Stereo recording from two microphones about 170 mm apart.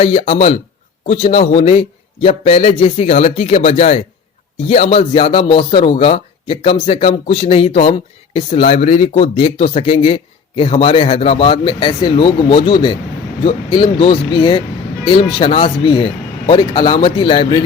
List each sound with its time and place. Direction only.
0.0 s a man's voice: 40° left (ahead or behind)